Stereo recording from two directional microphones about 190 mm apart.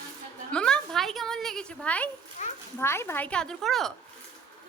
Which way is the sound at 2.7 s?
15° left (ahead or behind).